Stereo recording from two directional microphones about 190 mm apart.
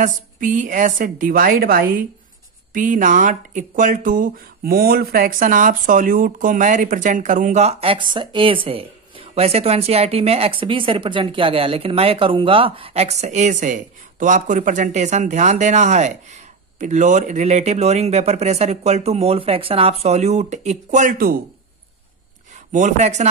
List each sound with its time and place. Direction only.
0.0 s speech: 45° right (ahead or behind)
22.7 s speech: 40° right (ahead or behind)